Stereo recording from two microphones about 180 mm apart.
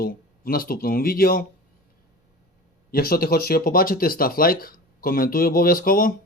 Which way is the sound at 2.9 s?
55° left (ahead or behind).